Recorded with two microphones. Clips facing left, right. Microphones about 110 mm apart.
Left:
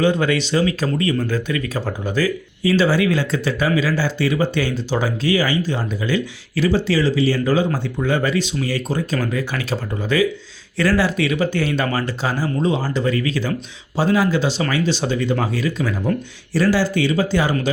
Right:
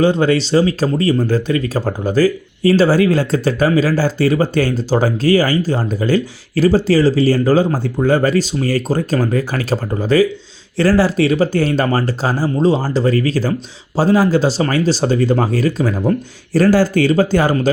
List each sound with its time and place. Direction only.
0.0 s speech: 30° right (ahead or behind)